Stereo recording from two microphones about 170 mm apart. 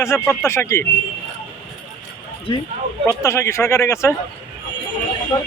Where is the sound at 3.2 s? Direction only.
15° left (ahead or behind).